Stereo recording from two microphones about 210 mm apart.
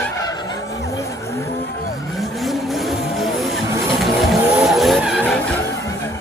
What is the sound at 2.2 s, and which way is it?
Vehicle, centre (ahead or behind).